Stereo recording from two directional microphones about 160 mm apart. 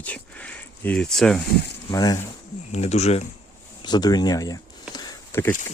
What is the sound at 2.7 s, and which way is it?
Speech, 45° left (ahead or behind).